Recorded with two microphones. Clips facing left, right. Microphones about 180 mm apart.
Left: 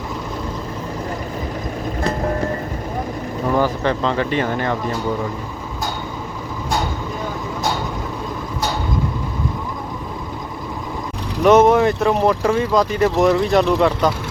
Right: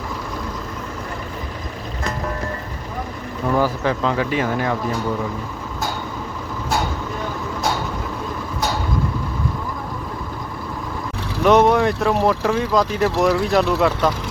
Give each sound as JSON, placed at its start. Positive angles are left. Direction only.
{"t": 2.0, "sound": "music", "side_deg": 35}
{"t": 3.6, "sound": "speech", "side_deg": -5}
{"t": 11.4, "sound": "speech", "side_deg": 0}